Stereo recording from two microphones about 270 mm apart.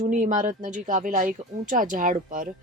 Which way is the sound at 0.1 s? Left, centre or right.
Right.